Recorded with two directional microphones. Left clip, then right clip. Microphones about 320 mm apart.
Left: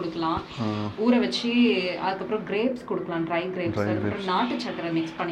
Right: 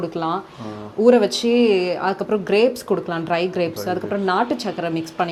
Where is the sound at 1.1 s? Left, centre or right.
Right.